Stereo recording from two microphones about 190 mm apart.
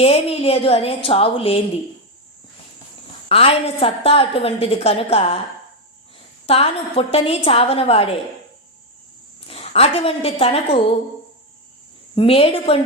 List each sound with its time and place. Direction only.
0.0 s a woman's voice: 30° left (ahead or behind)
3.2 s a woman's voice: 30° left (ahead or behind)
6.4 s a woman's voice: 30° left (ahead or behind)
9.5 s a woman's voice: 30° left (ahead or behind)
12.1 s a woman's voice: 30° left (ahead or behind)